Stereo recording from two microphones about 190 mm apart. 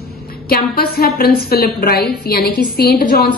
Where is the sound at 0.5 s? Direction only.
55° left (ahead or behind).